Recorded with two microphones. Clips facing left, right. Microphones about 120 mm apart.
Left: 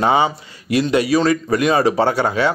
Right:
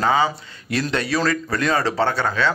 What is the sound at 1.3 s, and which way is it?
Speech, 15° left (ahead or behind).